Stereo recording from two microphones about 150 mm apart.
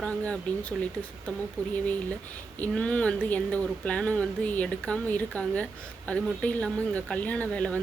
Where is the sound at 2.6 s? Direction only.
10° left (ahead or behind).